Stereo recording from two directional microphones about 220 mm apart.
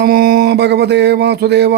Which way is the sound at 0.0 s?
45° right (ahead or behind).